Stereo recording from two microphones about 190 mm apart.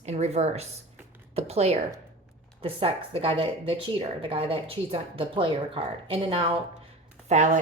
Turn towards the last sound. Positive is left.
turn(degrees=-40)  # may be behind; listen again after turning